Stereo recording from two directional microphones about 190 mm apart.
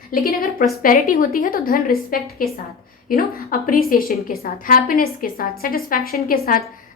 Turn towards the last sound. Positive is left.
turn(degrees=50)  # may be behind; listen again after turning